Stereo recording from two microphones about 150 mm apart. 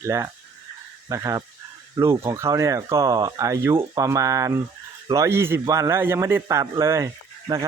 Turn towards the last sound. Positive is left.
turn(degrees=-20)  # may be behind; listen again after turning